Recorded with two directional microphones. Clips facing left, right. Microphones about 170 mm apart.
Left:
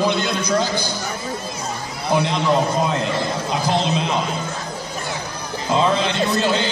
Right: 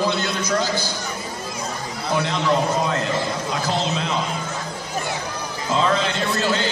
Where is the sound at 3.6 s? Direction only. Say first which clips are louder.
Left 4 dB; 15° left (ahead or behind).